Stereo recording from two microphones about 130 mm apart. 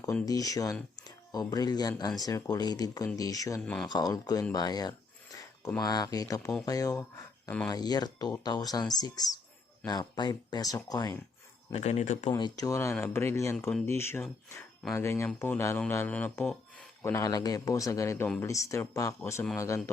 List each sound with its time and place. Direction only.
0.3 s speech: 25° left (ahead or behind)
3.6 s speech: 5° left (ahead or behind)
3.8 s speech: 30° left (ahead or behind)
4.5 s a sound: 30° left (ahead or behind)
5.8 s speech: 30° left (ahead or behind)
11.7 s speech: 55° left (ahead or behind)
12.4 s speech: 30° left (ahead or behind)